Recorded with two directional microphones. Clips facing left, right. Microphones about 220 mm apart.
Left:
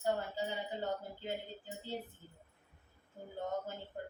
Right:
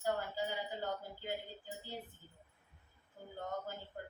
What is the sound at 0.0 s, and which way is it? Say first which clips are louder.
Speech: left 2 dB; 25° left (ahead or behind).